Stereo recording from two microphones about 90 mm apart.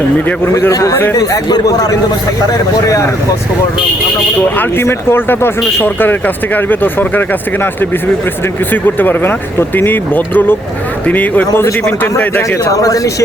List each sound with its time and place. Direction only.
0.7 s a man's voice: 35° left (ahead or behind)
2.5 s speech: 35° left (ahead or behind)
4.4 s speech: 20° left (ahead or behind); by 13.2 s 40° left (ahead or behind)